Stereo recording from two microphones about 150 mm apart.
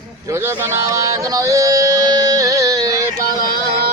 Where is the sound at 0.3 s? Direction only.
15° right (ahead or behind).